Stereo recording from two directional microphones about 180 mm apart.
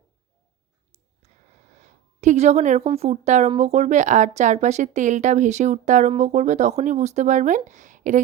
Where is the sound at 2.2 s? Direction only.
40° right (ahead or behind).